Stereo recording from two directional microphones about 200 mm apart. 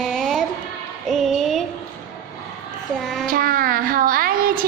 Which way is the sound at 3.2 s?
45° right (ahead or behind).